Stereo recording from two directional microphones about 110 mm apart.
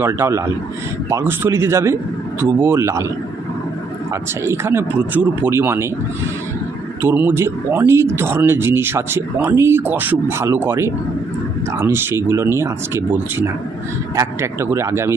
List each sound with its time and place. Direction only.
0.0 s speech: 25° right (ahead or behind)
4.1 s speech: 25° right (ahead or behind)
7.0 s speech: 15° right (ahead or behind)
14.2 s speech: 25° right (ahead or behind)